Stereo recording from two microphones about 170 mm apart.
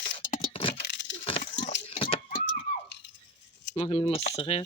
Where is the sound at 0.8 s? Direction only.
90° left.